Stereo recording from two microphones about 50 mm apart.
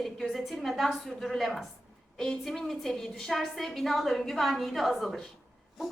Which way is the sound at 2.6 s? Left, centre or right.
Centre.